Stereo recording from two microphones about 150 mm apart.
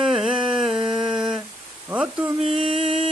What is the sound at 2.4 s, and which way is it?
Mantra, 40° right (ahead or behind).